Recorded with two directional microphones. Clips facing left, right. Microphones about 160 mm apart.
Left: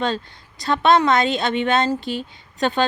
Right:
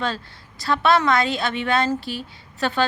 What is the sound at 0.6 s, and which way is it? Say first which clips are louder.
A woman's voice: left 2 dB; 20° left (ahead or behind).